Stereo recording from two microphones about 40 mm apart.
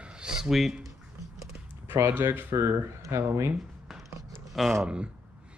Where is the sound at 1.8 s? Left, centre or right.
Right.